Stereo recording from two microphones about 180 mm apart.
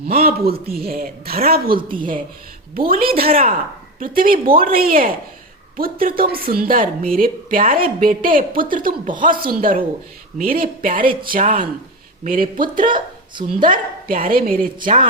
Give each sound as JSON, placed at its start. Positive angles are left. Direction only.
{"t": 0.1, "sound": "a woman's voice", "side_deg": -60}